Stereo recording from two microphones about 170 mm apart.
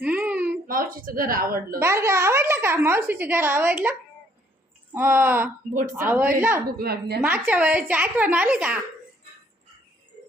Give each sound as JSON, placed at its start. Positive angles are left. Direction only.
{"t": 0.0, "sound": "a sound", "side_deg": -10}
{"t": 0.7, "sound": "a woman's voice", "side_deg": -55}
{"t": 1.8, "sound": "speech", "side_deg": -15}
{"t": 4.9, "sound": "speech", "side_deg": -10}
{"t": 6.7, "sound": "a woman's voice", "side_deg": -65}
{"t": 7.2, "sound": "speech", "side_deg": -10}